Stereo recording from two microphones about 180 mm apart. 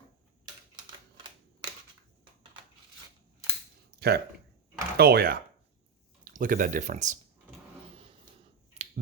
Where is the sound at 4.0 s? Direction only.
60° right (ahead or behind).